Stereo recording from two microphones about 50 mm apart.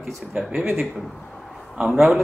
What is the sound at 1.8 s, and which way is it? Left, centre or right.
Speech, centre.